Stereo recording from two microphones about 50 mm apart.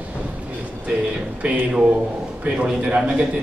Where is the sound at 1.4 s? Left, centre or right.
Right.